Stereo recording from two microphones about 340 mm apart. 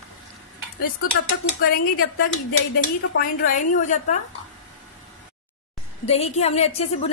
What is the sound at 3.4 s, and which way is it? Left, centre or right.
Speech, left.